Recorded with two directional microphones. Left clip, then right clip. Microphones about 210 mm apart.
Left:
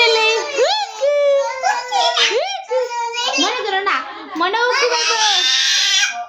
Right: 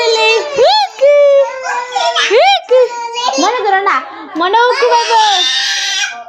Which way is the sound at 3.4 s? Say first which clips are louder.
Right 7 dB; 15° right (ahead or behind).